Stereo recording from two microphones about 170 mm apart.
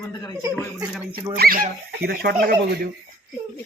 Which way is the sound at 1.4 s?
60° right (ahead or behind).